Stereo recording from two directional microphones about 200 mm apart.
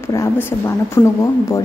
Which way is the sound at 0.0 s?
15° left (ahead or behind).